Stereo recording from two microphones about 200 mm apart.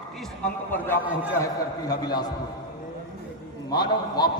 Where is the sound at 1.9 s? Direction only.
20° left (ahead or behind).